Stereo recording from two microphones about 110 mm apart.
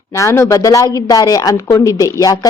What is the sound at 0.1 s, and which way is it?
A woman's voice, 25° left (ahead or behind).